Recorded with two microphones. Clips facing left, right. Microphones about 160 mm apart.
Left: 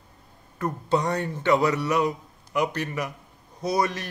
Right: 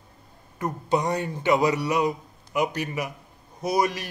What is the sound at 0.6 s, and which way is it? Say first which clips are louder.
A man's voice: even; 10° right (ahead or behind).